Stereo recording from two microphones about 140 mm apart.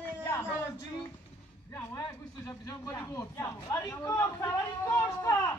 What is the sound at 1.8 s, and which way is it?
Speech, 25° left (ahead or behind).